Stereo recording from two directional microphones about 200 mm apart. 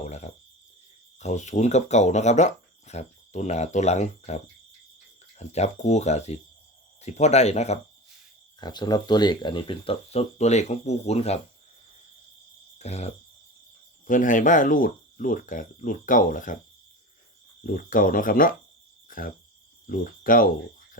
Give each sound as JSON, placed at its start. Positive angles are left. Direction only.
{"t": 0.0, "sound": "cricket", "side_deg": 35}
{"t": 1.2, "sound": "speech", "side_deg": 35}
{"t": 8.6, "sound": "speech", "side_deg": 20}
{"t": 12.8, "sound": "speech", "side_deg": 35}
{"t": 17.6, "sound": "speech", "side_deg": 45}
{"t": 19.0, "sound": "cricket", "side_deg": 45}
{"t": 19.9, "sound": "speech", "side_deg": 45}